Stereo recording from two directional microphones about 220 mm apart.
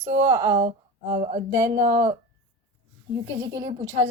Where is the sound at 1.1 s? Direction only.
30° right (ahead or behind).